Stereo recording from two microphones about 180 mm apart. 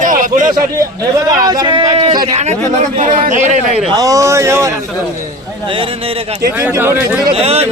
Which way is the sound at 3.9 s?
20° right (ahead or behind).